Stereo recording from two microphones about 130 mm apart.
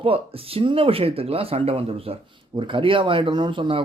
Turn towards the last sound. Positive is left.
turn(degrees=-40)  # may be behind; listen again after turning